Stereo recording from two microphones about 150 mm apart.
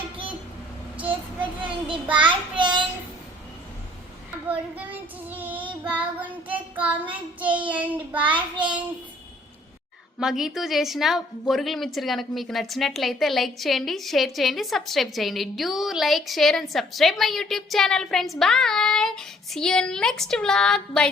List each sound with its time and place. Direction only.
1.4 s child singing: 35° right (ahead or behind)
4.4 s child singing: 10° right (ahead or behind)
10.2 s a woman's voice: 5° right (ahead or behind)